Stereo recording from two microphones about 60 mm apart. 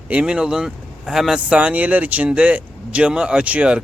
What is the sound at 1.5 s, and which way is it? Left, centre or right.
Speech, right.